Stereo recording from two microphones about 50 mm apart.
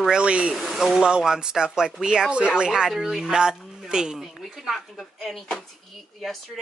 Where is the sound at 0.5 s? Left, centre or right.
Centre.